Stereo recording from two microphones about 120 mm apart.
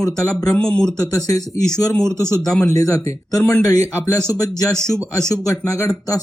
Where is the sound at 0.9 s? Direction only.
30° left (ahead or behind).